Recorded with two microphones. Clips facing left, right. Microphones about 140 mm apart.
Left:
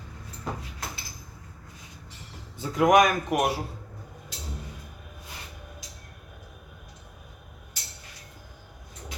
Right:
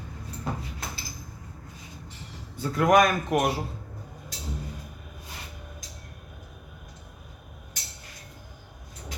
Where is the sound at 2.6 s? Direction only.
15° left (ahead or behind).